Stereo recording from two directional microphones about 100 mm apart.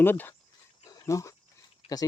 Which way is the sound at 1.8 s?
75° left (ahead or behind).